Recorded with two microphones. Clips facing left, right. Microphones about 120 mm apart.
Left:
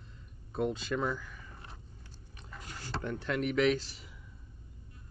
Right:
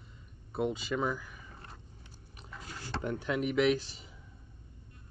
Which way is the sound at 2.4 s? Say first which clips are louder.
Right 1 dB; 5° right (ahead or behind).